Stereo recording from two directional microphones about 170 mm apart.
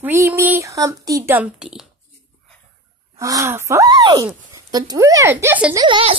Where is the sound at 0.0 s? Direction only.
10° right (ahead or behind).